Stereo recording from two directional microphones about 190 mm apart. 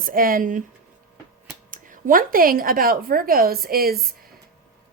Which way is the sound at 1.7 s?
45° right (ahead or behind).